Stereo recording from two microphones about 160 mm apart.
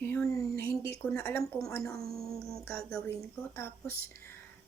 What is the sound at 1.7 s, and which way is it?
Speech, 20° left (ahead or behind).